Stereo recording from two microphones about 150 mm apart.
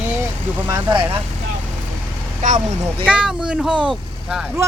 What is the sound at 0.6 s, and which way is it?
Speech, 30° right (ahead or behind).